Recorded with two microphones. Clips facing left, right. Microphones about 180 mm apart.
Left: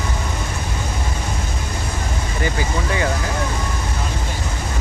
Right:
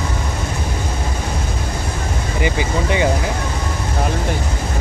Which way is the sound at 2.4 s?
20° right (ahead or behind).